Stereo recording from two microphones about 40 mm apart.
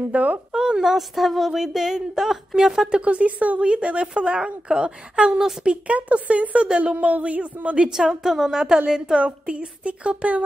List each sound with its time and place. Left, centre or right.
0.1 s a woman's voice: right
0.5 s a sound: centre
0.9 s speech: centre
2.9 s a woman's voice: right
5.7 s a woman's voice: right
7.9 s a woman's voice: centre; by 10.4 s right